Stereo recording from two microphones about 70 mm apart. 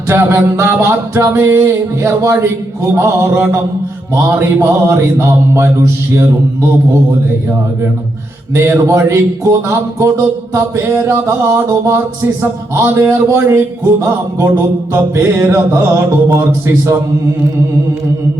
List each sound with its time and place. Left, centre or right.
0.1 s speech: right
8.5 s speech: right